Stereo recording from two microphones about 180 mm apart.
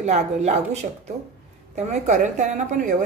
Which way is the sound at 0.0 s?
40° right (ahead or behind).